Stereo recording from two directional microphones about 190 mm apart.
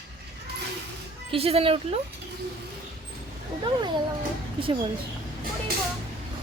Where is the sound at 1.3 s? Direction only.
30° right (ahead or behind).